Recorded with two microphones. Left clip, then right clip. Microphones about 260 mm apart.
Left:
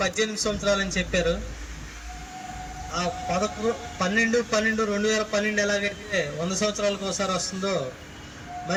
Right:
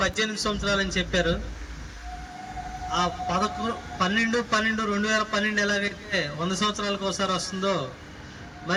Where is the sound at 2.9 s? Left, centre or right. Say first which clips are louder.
Right 1 dB; centre.